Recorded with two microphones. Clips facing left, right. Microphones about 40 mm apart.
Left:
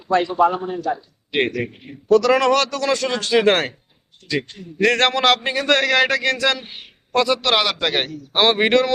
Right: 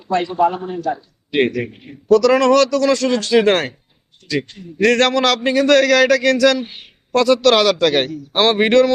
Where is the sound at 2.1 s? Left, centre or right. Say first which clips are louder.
Right 3 dB; left.